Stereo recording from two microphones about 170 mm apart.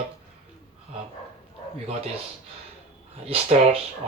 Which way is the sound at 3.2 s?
35° right (ahead or behind).